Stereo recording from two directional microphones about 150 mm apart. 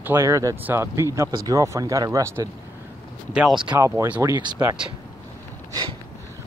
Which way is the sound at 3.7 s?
20° right (ahead or behind).